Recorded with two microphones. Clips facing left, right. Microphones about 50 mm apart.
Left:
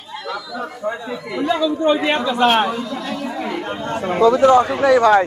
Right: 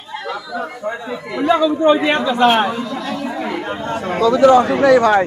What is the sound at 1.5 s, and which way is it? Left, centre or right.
Speech, right.